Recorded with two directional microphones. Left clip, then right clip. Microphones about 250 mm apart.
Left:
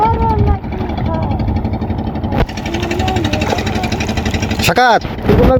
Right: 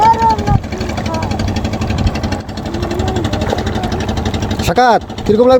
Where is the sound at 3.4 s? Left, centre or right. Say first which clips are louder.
Left 1 dB; left.